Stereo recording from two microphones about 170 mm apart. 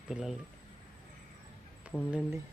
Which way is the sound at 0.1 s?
5° right (ahead or behind).